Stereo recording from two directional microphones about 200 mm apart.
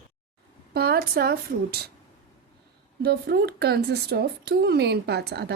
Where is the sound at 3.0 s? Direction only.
55° right (ahead or behind).